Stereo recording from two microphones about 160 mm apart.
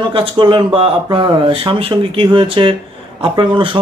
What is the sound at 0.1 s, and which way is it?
Speech, 30° right (ahead or behind).